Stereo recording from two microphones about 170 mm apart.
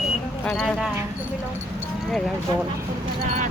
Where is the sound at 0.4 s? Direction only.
5° left (ahead or behind).